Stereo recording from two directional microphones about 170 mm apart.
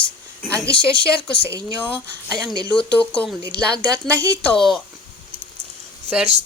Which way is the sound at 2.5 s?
5° left (ahead or behind).